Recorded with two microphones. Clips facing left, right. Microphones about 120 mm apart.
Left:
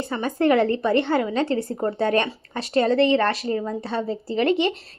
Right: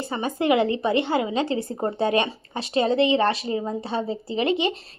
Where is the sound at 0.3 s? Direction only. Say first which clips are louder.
Left 2 dB; 10° right (ahead or behind).